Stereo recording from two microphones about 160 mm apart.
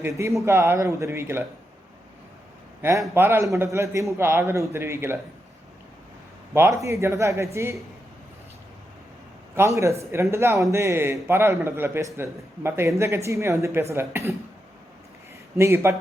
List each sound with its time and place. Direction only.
0.2 s speech: 20° right (ahead or behind)
2.8 s speech: 15° right (ahead or behind)
6.5 s speech: 15° right (ahead or behind)
9.6 s a man's voice: 20° right (ahead or behind)
15.5 s speech: 15° right (ahead or behind)